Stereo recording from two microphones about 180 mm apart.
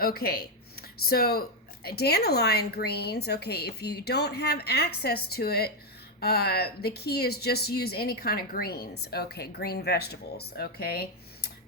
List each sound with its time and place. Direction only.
0.0 s speech: 60° left (ahead or behind)